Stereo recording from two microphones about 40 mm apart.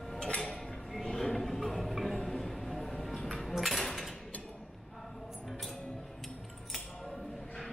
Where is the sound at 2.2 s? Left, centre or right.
Centre.